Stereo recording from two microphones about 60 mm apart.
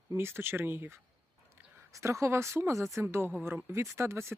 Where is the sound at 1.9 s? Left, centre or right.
Right.